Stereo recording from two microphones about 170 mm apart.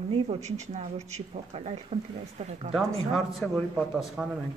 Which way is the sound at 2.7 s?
Centre (ahead or behind).